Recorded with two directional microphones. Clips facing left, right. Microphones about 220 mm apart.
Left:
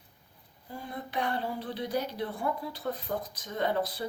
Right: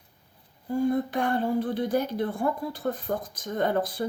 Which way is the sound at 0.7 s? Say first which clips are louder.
Right 14 dB; 45° right (ahead or behind).